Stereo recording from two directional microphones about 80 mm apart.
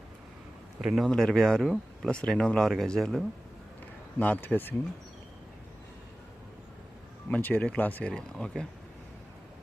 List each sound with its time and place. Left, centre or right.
0.8 s speech: centre
4.2 s speech: left
7.3 s speech: centre
8.0 s speech: centre